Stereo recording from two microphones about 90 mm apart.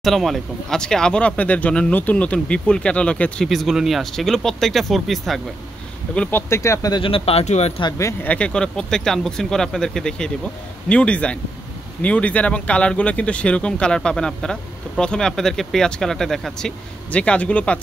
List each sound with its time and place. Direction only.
0.0 s speech: centre (ahead or behind)
3.4 s speech: centre (ahead or behind)
6.3 s speech: 30° left (ahead or behind)
7.0 s speech: 90° left
8.2 s speech: 15° left (ahead or behind)